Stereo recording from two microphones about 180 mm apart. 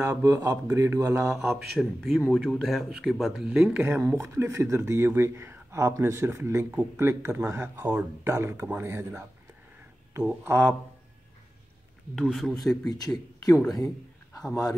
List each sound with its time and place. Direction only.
0.0 s speech: 15° right (ahead or behind)
10.1 s speech: 15° right (ahead or behind)
12.2 s speech: centre (ahead or behind)
12.9 s speech: 20° left (ahead or behind)
13.7 s a sound: 20° left (ahead or behind)
14.5 s speech: 20° left (ahead or behind)